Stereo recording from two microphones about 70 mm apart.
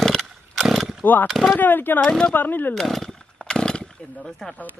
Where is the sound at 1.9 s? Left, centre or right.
Centre.